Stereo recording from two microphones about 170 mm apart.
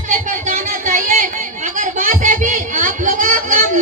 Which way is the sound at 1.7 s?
50° right (ahead or behind).